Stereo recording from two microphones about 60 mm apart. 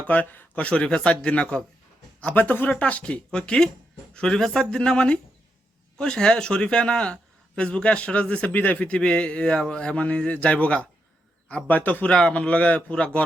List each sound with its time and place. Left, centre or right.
0.0 s speech: left
2.2 s speech: left